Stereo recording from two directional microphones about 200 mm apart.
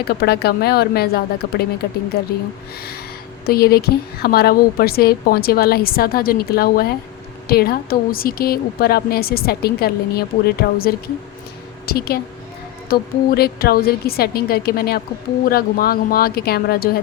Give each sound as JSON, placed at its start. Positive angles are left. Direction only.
{"t": 0.1, "sound": "a woman's voice", "side_deg": 50}
{"t": 3.4, "sound": "a woman's voice", "side_deg": 50}